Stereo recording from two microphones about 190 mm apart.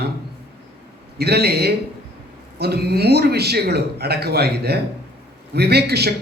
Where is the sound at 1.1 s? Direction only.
60° right (ahead or behind).